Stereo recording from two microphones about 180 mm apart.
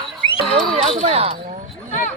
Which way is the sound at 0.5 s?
35° right (ahead or behind).